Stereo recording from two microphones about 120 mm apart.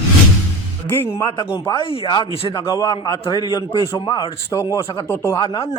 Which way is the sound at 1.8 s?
45° left (ahead or behind).